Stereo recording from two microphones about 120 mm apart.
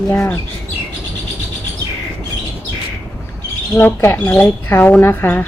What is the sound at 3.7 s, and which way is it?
Speech, 15° left (ahead or behind).